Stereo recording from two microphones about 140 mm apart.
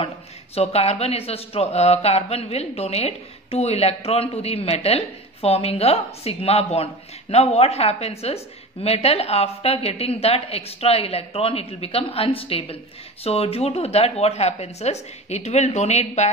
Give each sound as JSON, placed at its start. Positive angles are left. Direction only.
{"t": 0.6, "sound": "speech", "side_deg": 45}